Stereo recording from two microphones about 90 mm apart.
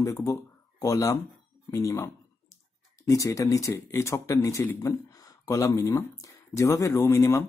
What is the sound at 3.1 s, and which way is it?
Speech, 35° left (ahead or behind).